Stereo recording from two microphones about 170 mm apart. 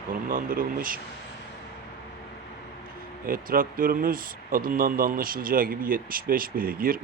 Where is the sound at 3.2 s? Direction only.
55° right (ahead or behind).